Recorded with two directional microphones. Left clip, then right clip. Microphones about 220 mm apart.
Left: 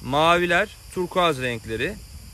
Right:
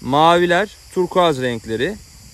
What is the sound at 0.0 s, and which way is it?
Speech, 35° right (ahead or behind).